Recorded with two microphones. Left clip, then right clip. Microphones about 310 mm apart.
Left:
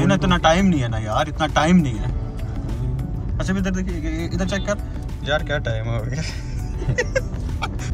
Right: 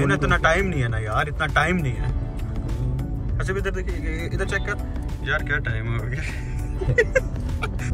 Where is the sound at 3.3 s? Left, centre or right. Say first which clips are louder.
Left 1 dB; centre.